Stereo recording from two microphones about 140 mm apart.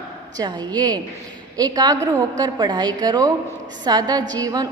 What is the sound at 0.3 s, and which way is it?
A woman's voice, 30° right (ahead or behind).